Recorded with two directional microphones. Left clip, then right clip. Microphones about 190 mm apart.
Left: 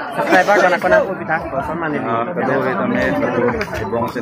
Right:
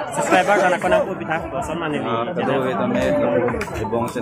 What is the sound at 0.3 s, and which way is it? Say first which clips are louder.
A man's voice: left 4 dB; 5° right (ahead or behind).